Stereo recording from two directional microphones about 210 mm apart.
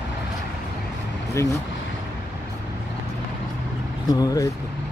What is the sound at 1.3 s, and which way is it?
Speech, 15° left (ahead or behind).